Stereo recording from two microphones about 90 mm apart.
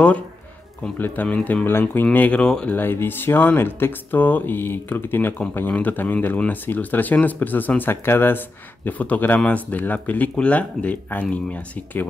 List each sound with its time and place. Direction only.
0.9 s speech: 20° left (ahead or behind)
2.7 s speech: 25° left (ahead or behind)